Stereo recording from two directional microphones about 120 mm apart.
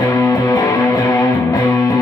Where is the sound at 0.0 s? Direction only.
25° left (ahead or behind).